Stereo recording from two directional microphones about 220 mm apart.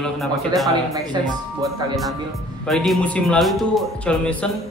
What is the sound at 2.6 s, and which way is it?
Speech, centre (ahead or behind).